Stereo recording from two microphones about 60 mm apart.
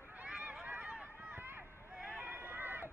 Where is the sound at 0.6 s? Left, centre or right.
Right.